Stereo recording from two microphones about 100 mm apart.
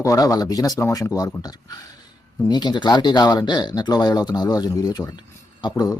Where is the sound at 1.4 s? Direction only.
40° left (ahead or behind).